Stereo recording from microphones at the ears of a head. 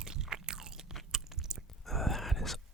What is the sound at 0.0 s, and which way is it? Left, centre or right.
Biting, right.